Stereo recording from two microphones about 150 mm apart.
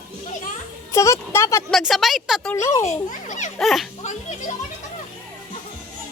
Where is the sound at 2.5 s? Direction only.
20° left (ahead or behind).